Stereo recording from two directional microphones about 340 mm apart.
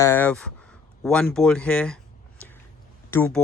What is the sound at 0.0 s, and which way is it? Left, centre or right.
Speech, centre.